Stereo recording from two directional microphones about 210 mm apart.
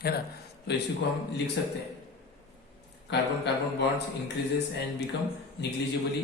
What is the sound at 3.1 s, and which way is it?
Mantra, 55° left (ahead or behind).